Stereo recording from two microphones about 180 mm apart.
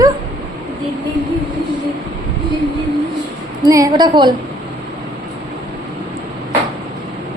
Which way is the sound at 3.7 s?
20° right (ahead or behind).